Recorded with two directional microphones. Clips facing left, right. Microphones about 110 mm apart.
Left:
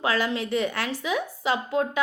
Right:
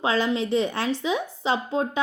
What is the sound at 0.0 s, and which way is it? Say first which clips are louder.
A woman's voice: right 2 dB; 25° right (ahead or behind).